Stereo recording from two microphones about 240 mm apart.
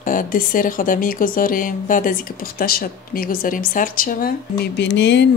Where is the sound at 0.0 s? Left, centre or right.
Left.